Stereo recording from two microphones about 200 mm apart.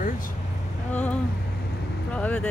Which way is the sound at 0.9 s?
5° left (ahead or behind).